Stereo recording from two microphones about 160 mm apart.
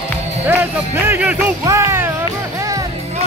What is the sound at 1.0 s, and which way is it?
Music, 15° right (ahead or behind).